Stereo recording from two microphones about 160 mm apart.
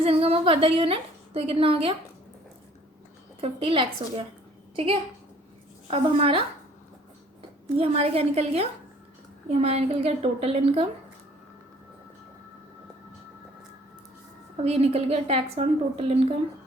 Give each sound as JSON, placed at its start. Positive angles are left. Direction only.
{"t": 0.0, "sound": "a woman's voice", "side_deg": -35}
{"t": 3.4, "sound": "a woman's voice", "side_deg": -35}
{"t": 5.9, "sound": "a woman's voice", "side_deg": -35}
{"t": 7.8, "sound": "a woman's voice", "side_deg": -40}
{"t": 14.6, "sound": "a woman's voice", "side_deg": -40}